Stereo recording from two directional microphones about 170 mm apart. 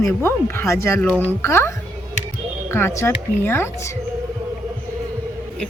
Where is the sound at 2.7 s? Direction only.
15° left (ahead or behind).